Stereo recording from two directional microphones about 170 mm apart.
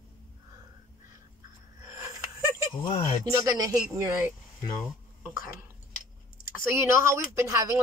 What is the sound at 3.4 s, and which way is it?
Speech, 20° right (ahead or behind).